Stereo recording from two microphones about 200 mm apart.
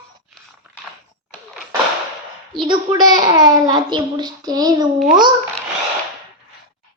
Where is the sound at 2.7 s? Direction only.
20° right (ahead or behind).